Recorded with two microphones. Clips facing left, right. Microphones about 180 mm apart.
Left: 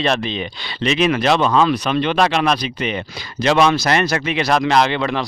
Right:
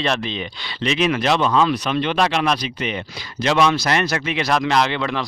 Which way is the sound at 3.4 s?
65° left (ahead or behind).